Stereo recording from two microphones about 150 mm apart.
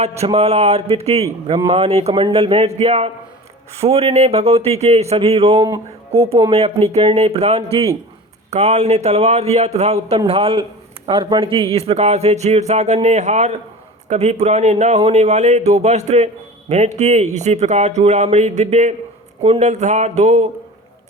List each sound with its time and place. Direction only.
0.3 s speech: 45° right (ahead or behind)
1.5 s speech: 25° right (ahead or behind)
1.7 s speech: 45° right (ahead or behind)
5.5 s speech: 25° right (ahead or behind)
6.5 s a man's voice: 40° right (ahead or behind)